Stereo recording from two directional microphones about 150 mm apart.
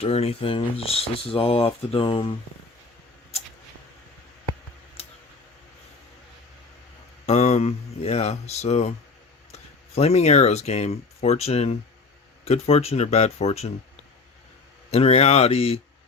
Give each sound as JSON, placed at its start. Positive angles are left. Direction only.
{"t": 0.0, "sound": "speech", "side_deg": 45}
{"t": 5.0, "sound": "a sound", "side_deg": 40}
{"t": 7.3, "sound": "speech", "side_deg": 50}
{"t": 14.8, "sound": "speech", "side_deg": 40}